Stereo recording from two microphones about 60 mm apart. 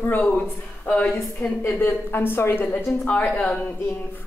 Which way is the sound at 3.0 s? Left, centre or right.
Left.